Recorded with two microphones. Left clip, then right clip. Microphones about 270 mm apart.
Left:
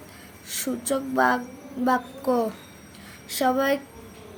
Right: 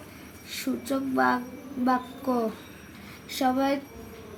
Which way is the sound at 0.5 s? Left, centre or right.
Left.